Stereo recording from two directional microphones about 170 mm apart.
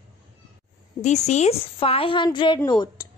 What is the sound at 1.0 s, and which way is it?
A woman's voice, 40° left (ahead or behind).